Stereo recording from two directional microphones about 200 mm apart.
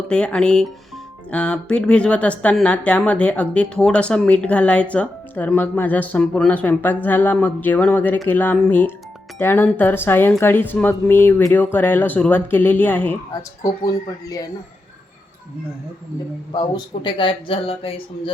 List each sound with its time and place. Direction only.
0.1 s speech: 5° left (ahead or behind)
16.5 s speech: 25° left (ahead or behind)